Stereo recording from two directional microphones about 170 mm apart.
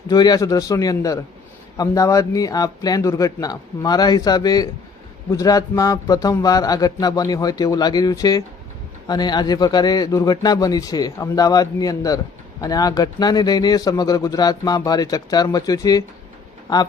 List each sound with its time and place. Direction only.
0.1 s a man's voice: 25° left (ahead or behind)